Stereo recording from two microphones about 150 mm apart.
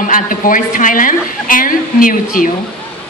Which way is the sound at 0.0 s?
65° left (ahead or behind).